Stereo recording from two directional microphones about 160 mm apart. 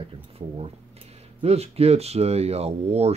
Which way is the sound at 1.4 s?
40° right (ahead or behind).